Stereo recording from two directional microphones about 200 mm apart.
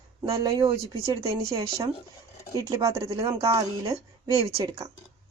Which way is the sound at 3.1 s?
25° right (ahead or behind).